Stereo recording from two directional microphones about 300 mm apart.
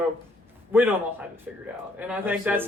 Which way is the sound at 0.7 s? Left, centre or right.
Centre.